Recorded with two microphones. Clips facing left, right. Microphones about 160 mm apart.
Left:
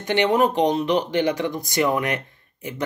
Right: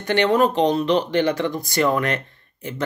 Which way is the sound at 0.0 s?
15° left (ahead or behind).